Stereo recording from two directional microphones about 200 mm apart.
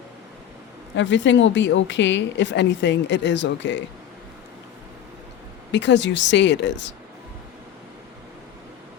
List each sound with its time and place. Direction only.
0.9 s a woman's voice: 65° left (ahead or behind)
5.7 s a woman's voice: 65° left (ahead or behind)